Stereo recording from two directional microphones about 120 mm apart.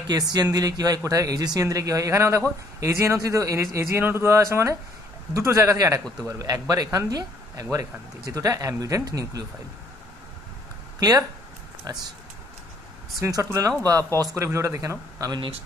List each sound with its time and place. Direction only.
0.0 s speech: 35° right (ahead or behind)
11.0 s speech: 30° right (ahead or behind)
13.2 s speech: 25° right (ahead or behind)